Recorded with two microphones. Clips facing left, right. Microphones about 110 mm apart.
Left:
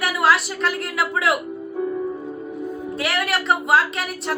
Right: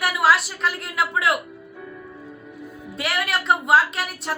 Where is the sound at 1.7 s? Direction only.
35° left (ahead or behind).